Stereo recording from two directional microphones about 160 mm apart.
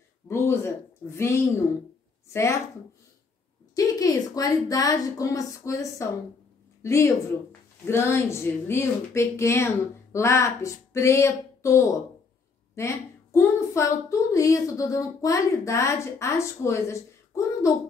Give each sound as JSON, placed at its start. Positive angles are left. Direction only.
{"t": 0.3, "sound": "a woman's voice", "side_deg": 15}
{"t": 3.7, "sound": "a woman's voice", "side_deg": 20}